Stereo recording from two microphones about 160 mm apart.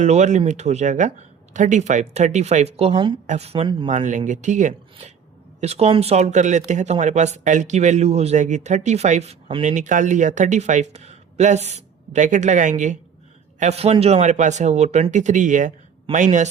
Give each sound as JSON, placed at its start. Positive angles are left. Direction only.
{"t": 0.0, "sound": "speech", "side_deg": -45}
{"t": 3.8, "sound": "speech", "side_deg": -50}
{"t": 9.6, "sound": "speech", "side_deg": -50}